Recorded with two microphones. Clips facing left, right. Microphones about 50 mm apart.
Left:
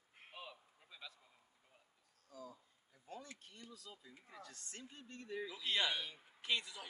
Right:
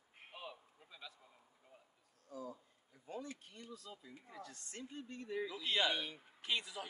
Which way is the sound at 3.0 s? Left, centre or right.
Centre.